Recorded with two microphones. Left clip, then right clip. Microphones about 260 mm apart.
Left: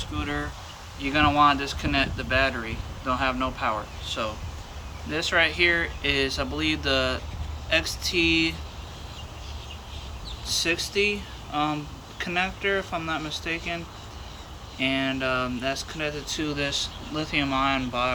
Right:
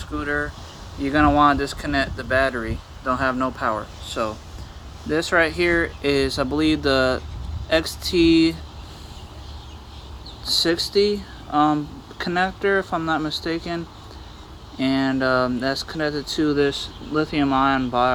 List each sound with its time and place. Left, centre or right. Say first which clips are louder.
0.0 s speech: right 6 dB; centre
10.6 s speech: right 5 dB; right